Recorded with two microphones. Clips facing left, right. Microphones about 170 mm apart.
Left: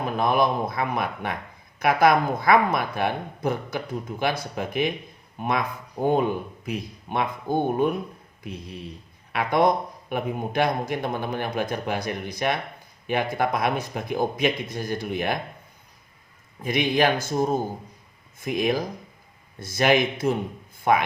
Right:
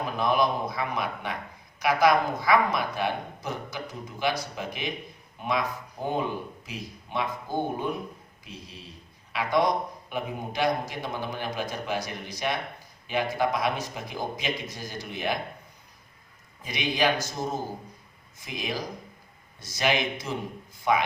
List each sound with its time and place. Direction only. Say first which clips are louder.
0.0 s a man's voice: left 3 dB; 55° left (ahead or behind)
16.6 s speech: left 5 dB; 55° left (ahead or behind)